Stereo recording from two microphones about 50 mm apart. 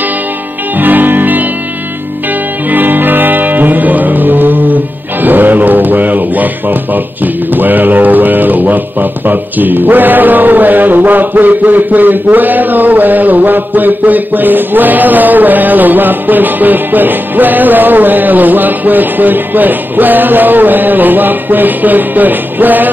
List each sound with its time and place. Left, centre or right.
0.7 s music: right
2.7 s music: right
7.5 s speech: right